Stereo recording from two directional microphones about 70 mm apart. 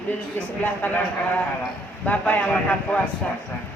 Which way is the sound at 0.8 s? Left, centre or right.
Left.